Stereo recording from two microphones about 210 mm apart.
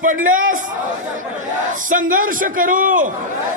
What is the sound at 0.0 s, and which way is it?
Speech, 40° right (ahead or behind).